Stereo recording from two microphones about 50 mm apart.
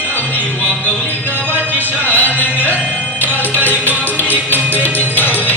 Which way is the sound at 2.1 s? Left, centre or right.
Left.